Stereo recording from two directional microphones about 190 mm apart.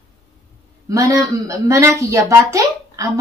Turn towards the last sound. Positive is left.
turn(degrees=-15)  # may be behind; listen again after turning